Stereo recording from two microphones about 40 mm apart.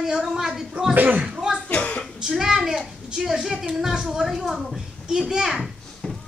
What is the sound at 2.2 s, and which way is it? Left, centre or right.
A child's voice, centre.